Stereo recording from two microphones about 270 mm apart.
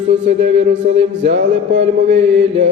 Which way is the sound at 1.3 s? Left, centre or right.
Right.